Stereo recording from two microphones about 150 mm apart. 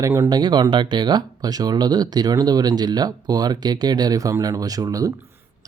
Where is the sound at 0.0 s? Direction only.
20° right (ahead or behind).